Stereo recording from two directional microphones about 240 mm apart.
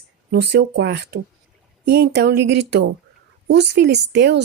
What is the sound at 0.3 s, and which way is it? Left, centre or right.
Speech, right.